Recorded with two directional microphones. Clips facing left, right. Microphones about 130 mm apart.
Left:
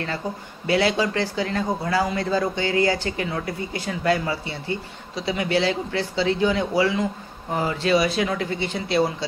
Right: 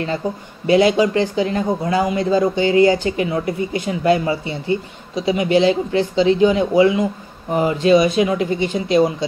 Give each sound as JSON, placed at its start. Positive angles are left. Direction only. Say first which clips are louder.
{"t": 0.7, "sound": "a man's voice", "louder": "right 7 dB", "side_deg": -20}